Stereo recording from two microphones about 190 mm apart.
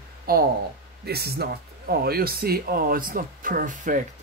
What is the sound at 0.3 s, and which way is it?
Speech, 55° right (ahead or behind).